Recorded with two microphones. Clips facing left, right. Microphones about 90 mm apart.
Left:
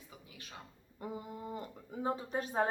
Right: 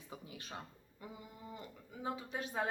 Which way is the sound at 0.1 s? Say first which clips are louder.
Right 6 dB; 30° right (ahead or behind).